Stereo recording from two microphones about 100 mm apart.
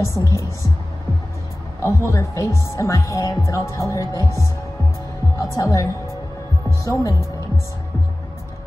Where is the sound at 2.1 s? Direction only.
30° left (ahead or behind).